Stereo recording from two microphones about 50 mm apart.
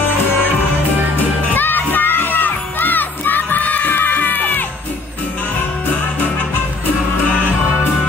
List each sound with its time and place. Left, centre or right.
1.5 s crowd: left